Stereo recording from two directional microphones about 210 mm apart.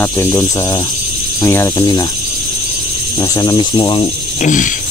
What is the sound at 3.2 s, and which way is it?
Speech, 20° left (ahead or behind).